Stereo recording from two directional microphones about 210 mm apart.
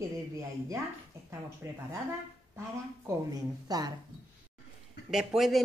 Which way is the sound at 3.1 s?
15° right (ahead or behind).